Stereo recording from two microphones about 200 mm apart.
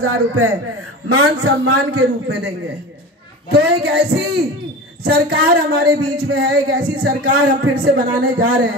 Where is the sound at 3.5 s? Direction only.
50° right (ahead or behind).